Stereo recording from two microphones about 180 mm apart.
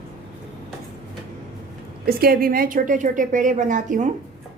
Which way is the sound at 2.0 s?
55° right (ahead or behind).